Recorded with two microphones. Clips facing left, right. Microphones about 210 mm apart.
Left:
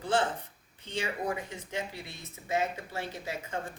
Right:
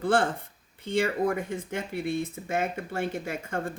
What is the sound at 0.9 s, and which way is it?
Speech, 55° right (ahead or behind).